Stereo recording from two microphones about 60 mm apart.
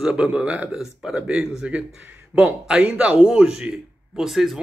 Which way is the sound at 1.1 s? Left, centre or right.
Centre.